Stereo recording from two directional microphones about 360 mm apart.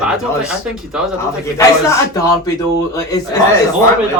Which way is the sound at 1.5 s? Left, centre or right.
Centre.